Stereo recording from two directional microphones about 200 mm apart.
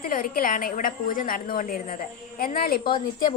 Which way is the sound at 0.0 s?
45° left (ahead or behind).